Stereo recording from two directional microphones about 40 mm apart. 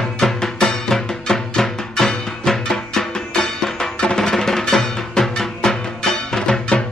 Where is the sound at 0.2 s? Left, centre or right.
Centre.